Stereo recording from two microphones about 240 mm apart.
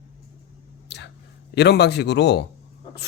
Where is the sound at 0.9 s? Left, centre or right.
Left.